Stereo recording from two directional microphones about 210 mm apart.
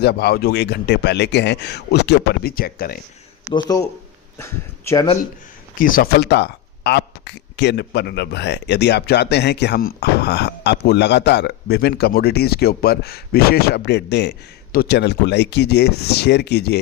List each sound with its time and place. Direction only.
0.0 s speech: 50° left (ahead or behind)
3.5 s speech: 15° left (ahead or behind)
5.7 s speech: 40° left (ahead or behind)